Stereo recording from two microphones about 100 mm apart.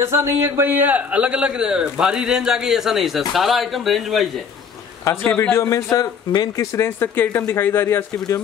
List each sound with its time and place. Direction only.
0.0 s a man's voice: 30° right (ahead or behind); by 4.3 s centre (ahead or behind)
5.3 s speech: 20° left (ahead or behind); by 6.6 s 40° left (ahead or behind)
6.6 s speech: 25° left (ahead or behind)